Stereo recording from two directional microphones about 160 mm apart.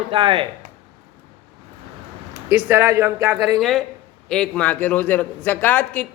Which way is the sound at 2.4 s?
10° right (ahead or behind).